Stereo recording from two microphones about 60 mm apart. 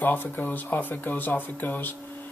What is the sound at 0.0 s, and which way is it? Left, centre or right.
Speech, left.